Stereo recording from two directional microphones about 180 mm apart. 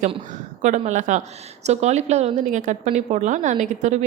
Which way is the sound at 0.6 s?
45° right (ahead or behind).